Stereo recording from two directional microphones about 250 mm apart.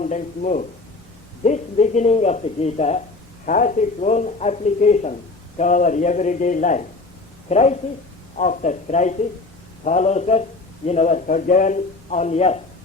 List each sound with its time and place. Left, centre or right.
0.0 s speech: left